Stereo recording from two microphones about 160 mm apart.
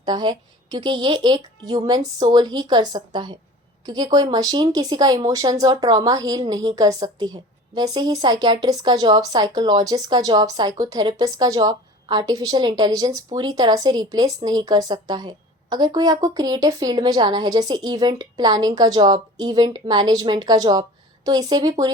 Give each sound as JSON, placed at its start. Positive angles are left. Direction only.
{"t": 0.0, "sound": "a woman's voice", "side_deg": -25}